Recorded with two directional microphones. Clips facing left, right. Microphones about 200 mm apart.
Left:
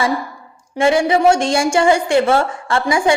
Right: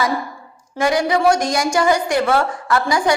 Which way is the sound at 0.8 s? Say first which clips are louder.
Left 3 dB; 25° left (ahead or behind).